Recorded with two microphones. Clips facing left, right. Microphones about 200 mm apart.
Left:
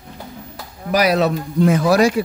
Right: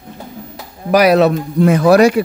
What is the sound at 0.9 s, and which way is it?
A man's voice, 60° right (ahead or behind).